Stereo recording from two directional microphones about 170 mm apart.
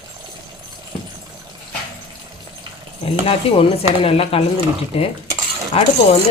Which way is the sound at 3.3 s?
35° left (ahead or behind).